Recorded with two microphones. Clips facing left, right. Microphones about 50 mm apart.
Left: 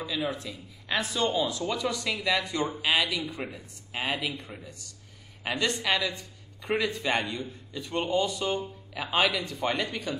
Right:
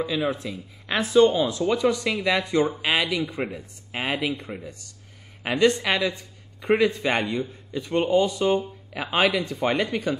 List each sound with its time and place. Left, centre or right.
0.0 s speech: right